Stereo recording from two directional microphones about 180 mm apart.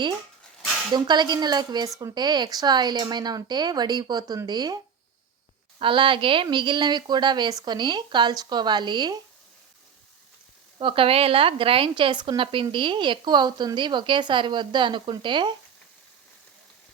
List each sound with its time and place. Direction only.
0.9 s a woman's voice: 25° right (ahead or behind)
5.8 s a woman's voice: 30° right (ahead or behind)
10.8 s a woman's voice: 30° right (ahead or behind)